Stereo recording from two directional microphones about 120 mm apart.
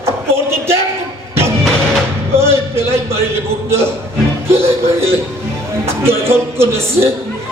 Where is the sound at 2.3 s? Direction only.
20° right (ahead or behind).